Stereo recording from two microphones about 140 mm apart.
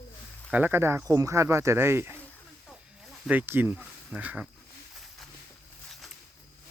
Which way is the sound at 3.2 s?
10° right (ahead or behind).